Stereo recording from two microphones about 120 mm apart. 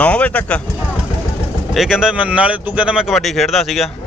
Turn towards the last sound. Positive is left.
turn(degrees=0)  # may be behind; listen again after turning